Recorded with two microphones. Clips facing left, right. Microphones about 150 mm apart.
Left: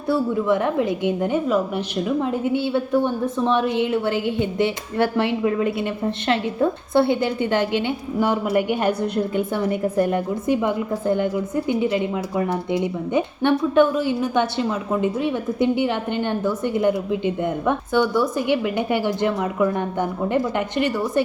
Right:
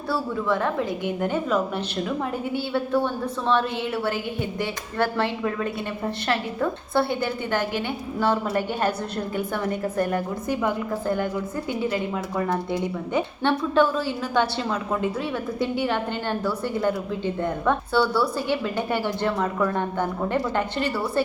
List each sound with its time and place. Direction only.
0.1 s a woman's voice: 20° left (ahead or behind)
1.5 s a woman's voice: 10° left (ahead or behind)
2.5 s a woman's voice: 20° left (ahead or behind)